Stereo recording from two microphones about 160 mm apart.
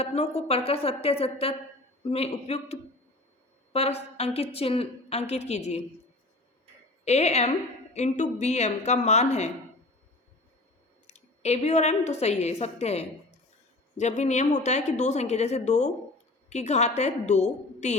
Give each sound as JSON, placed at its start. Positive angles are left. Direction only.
{"t": 0.0, "sound": "a woman's voice", "side_deg": 40}
{"t": 7.0, "sound": "a woman's voice", "side_deg": 45}
{"t": 11.0, "sound": "a woman's voice", "side_deg": 45}